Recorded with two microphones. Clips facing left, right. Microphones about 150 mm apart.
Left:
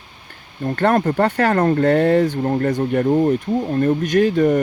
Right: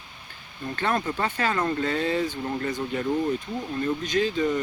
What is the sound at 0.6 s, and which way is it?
Speech, 55° left (ahead or behind).